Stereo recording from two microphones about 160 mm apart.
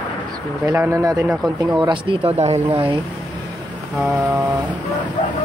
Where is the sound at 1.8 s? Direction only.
30° right (ahead or behind).